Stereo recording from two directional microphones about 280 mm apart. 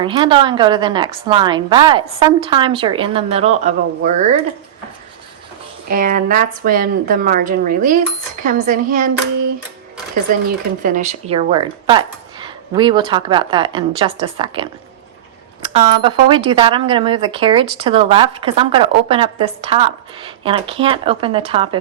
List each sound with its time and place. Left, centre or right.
0.0 s a woman's voice: centre
5.9 s a woman's voice: right
10.8 s a woman's voice: right